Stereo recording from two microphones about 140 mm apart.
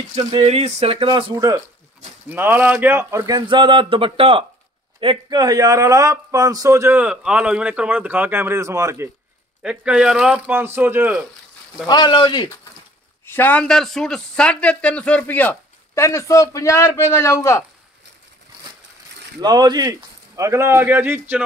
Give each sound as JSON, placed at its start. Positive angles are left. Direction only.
{"t": 0.5, "sound": "speech", "side_deg": -50}
{"t": 2.2, "sound": "a man's voice", "side_deg": -15}
{"t": 9.6, "sound": "speech", "side_deg": -5}
{"t": 11.9, "sound": "speech", "side_deg": 30}
{"t": 13.2, "sound": "speech", "side_deg": 15}
{"t": 19.4, "sound": "a man's voice", "side_deg": -30}